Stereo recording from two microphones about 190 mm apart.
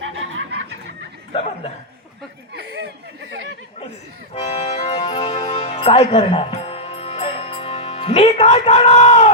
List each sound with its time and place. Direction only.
0.0 s snicker: 90° right; by 0.8 s 65° right (ahead or behind)
1.3 s speech: 30° left (ahead or behind)
4.4 s accordion: 35° left (ahead or behind)
5.6 s music: 35° left (ahead or behind)